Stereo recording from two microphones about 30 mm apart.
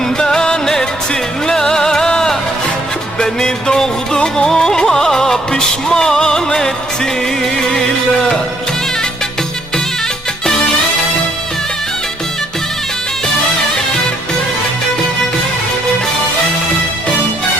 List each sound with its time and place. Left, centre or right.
0.2 s music: left